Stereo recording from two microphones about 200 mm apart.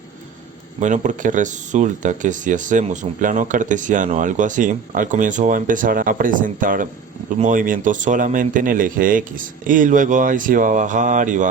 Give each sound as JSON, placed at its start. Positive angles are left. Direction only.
{"t": 0.8, "sound": "speech", "side_deg": -40}